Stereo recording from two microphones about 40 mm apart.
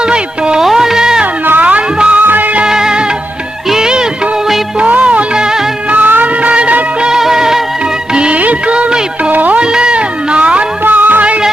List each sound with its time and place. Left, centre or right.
0.1 s music: right
0.6 s music: centre
2.0 s music of bollywood: right
2.6 s music: centre
4.8 s music of bollywood: right
5.9 s music: right
6.5 s music: right
7.2 s music of bollywood: centre
8.1 s music of bollywood: right
8.4 s music of bollywood: right
8.7 s music: right
9.3 s a sound: right
9.6 s music: right
10.8 s music: right